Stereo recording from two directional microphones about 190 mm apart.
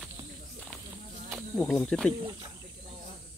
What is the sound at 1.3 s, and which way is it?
Speech, centre (ahead or behind).